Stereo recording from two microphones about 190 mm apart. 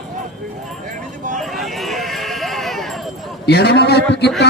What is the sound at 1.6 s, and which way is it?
Sheep, centre (ahead or behind).